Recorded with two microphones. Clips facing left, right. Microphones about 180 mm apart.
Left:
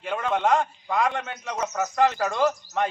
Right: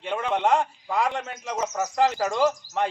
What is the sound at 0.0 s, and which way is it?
A man's voice, centre (ahead or behind).